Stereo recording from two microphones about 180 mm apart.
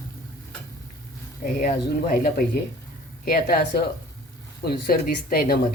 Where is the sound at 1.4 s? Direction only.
50° left (ahead or behind).